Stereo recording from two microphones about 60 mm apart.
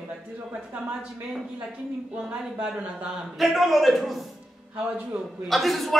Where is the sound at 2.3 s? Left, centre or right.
Right.